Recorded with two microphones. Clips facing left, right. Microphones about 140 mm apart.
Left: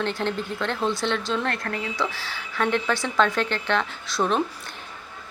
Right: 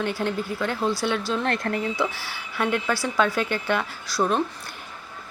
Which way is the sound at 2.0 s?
10° right (ahead or behind).